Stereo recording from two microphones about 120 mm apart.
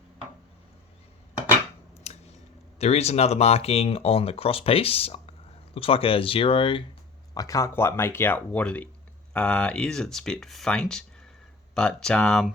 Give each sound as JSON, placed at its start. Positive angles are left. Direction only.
{"t": 2.7, "sound": "speech", "side_deg": 60}
{"t": 7.3, "sound": "speech", "side_deg": 25}